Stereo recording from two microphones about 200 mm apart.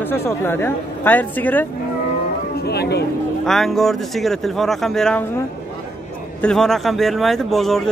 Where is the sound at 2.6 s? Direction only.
55° left (ahead or behind).